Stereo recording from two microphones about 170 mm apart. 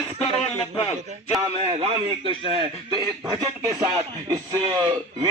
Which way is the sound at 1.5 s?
35° right (ahead or behind).